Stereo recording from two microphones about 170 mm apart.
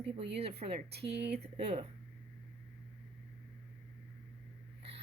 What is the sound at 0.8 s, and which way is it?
Speech, 80° right.